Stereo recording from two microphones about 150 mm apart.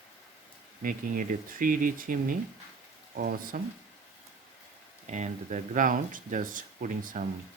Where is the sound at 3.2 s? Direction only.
80° right.